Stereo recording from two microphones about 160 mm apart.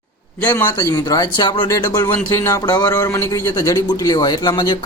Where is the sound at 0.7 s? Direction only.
25° left (ahead or behind).